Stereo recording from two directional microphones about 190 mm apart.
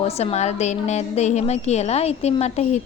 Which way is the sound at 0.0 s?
35° left (ahead or behind).